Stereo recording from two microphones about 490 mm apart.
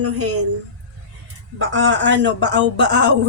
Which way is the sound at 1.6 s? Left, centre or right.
Right.